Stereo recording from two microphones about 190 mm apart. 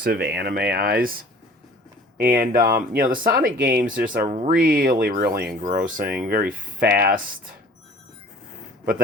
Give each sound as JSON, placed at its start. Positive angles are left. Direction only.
{"t": 0.0, "sound": "speech", "side_deg": -55}
{"t": 2.1, "sound": "speech", "side_deg": -50}